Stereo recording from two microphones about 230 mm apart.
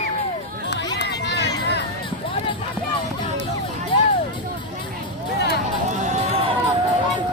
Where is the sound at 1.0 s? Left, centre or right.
Left.